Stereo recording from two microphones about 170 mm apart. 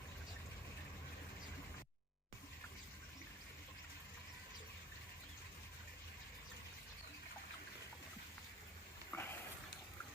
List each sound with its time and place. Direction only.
9.1 s sniff: 10° left (ahead or behind)